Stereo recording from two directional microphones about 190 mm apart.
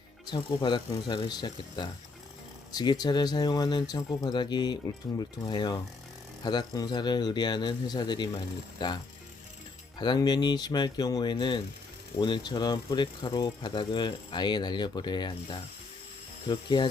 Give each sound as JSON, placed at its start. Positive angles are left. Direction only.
{"t": 0.3, "sound": "speech", "side_deg": 25}
{"t": 10.0, "sound": "speech", "side_deg": 20}